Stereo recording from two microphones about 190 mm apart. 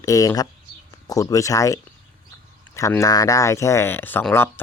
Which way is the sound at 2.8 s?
15° left (ahead or behind).